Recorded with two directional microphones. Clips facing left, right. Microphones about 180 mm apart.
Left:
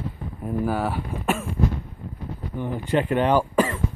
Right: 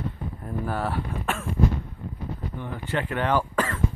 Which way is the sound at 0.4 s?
10° left (ahead or behind).